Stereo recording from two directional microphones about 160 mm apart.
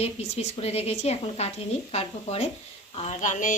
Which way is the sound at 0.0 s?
40° left (ahead or behind).